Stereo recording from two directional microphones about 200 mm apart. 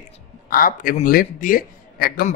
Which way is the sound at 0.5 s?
45° left (ahead or behind).